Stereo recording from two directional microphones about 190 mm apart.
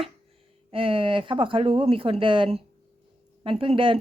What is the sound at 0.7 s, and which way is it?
Speech, 30° right (ahead or behind).